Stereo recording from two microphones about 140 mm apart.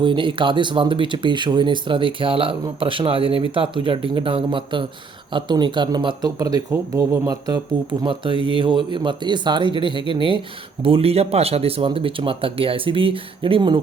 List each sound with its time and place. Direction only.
0.0 s speech: 35° right (ahead or behind)